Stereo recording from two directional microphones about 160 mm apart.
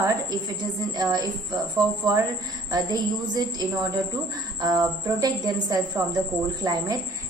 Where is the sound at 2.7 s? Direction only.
25° right (ahead or behind).